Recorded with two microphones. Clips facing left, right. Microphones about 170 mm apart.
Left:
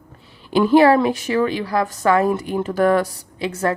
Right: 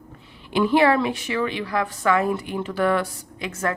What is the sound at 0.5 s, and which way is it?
A woman's voice, 40° left (ahead or behind).